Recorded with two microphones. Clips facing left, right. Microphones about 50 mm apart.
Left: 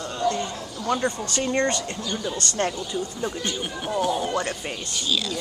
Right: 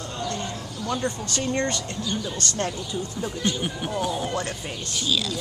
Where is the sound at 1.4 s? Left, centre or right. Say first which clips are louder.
Left 3 dB; centre.